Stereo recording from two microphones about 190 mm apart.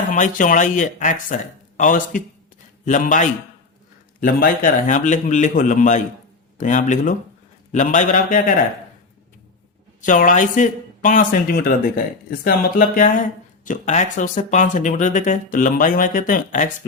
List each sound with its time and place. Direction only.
0.1 s a man's voice: 45° left (ahead or behind)
10.1 s a man's voice: 45° left (ahead or behind)